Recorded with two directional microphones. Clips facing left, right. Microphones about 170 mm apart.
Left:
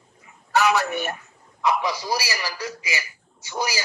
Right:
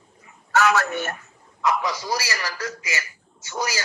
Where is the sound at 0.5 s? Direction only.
15° left (ahead or behind).